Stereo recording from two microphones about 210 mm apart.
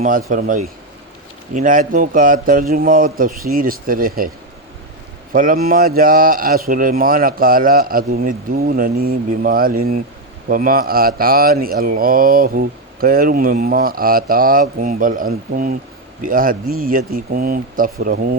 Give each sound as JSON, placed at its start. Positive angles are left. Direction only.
{"t": 0.0, "sound": "speech", "side_deg": -40}
{"t": 5.3, "sound": "speech", "side_deg": -40}